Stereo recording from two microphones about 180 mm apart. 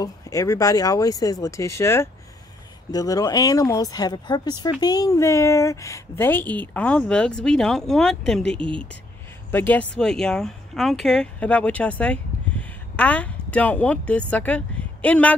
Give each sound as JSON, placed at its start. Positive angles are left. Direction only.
{"t": 0.0, "sound": "speech", "side_deg": 20}